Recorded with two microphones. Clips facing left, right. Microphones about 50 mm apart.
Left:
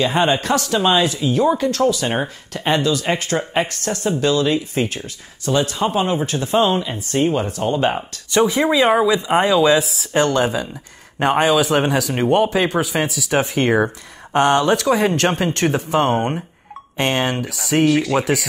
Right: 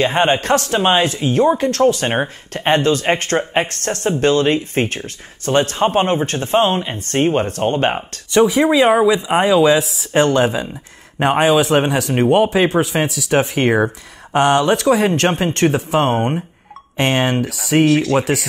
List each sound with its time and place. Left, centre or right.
0.0 s speech: right
8.4 s speech: centre
13.7 s speech: centre